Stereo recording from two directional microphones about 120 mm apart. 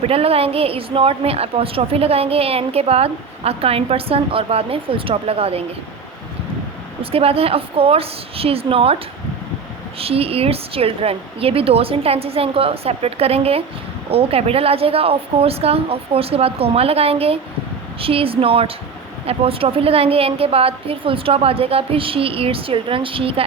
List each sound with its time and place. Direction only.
0.0 s a woman's voice: 55° right (ahead or behind)
7.0 s a woman's voice: 55° right (ahead or behind)
10.0 s a woman's voice: 55° right (ahead or behind)